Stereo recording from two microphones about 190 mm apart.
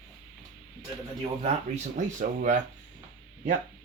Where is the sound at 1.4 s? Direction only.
40° right (ahead or behind).